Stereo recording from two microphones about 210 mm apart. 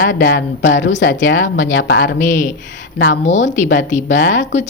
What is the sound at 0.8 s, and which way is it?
A woman's voice, 60° left (ahead or behind).